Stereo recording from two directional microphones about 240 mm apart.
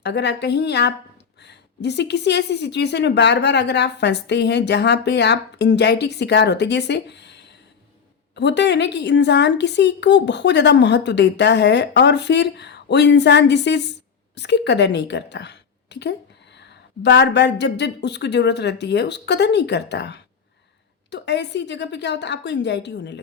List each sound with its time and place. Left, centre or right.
0.0 s a woman's voice: left